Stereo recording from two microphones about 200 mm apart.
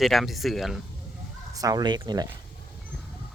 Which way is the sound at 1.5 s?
20° right (ahead or behind).